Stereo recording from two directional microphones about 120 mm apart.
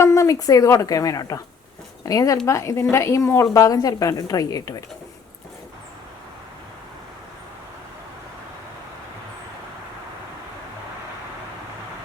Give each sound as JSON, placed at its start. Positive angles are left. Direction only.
{"t": 0.0, "sound": "a woman's voice", "side_deg": 25}